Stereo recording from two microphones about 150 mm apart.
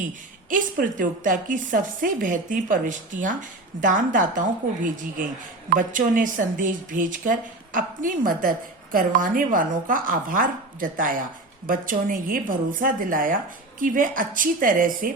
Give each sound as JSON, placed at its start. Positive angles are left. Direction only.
{"t": 0.5, "sound": "speech", "side_deg": -60}